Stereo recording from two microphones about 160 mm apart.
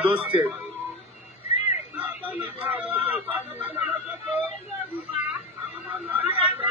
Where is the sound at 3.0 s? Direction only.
10° right (ahead or behind).